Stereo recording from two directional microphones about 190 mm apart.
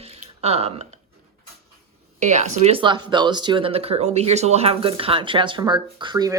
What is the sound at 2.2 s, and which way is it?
A woman's voice, 40° right (ahead or behind).